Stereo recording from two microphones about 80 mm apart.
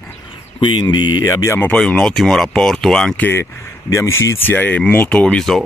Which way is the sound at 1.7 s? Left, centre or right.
Centre.